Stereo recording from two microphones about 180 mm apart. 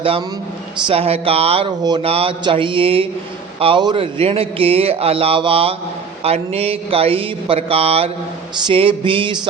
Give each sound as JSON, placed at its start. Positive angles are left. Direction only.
{"t": 0.0, "sound": "speech", "side_deg": -30}
{"t": 8.6, "sound": "music", "side_deg": -30}